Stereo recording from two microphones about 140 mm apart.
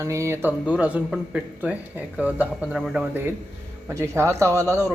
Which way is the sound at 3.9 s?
20° right (ahead or behind).